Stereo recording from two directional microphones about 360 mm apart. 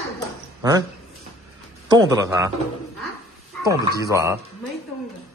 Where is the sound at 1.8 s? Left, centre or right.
Centre.